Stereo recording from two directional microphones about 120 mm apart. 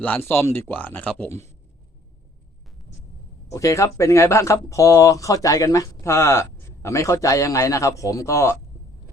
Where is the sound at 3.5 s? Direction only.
25° left (ahead or behind).